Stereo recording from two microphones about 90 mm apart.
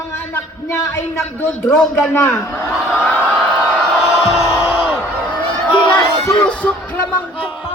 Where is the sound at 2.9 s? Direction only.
15° left (ahead or behind).